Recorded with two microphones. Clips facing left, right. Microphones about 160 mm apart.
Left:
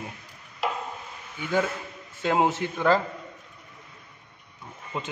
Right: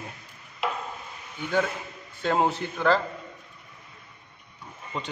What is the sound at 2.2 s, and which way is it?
Speech, 5° left (ahead or behind).